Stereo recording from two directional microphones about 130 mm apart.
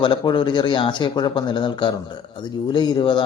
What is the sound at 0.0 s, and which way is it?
Speech, 35° left (ahead or behind).